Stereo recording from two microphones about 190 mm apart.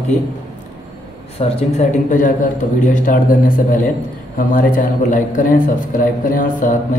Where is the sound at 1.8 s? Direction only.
45° left (ahead or behind).